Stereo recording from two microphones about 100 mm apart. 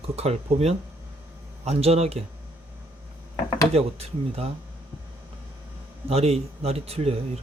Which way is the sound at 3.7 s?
90° right.